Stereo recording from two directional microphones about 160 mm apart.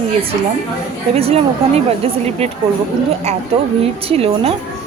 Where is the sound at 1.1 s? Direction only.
40° right (ahead or behind).